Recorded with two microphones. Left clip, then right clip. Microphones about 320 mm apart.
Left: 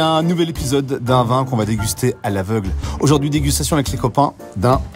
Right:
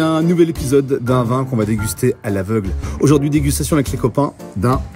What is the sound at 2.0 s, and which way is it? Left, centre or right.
Speech, left.